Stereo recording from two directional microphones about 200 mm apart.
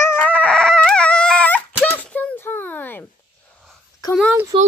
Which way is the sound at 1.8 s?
5° left (ahead or behind).